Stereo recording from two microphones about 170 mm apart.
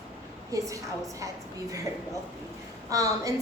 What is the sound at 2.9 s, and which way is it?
Speech, 20° right (ahead or behind).